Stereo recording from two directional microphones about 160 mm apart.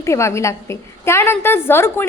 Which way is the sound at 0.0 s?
20° left (ahead or behind).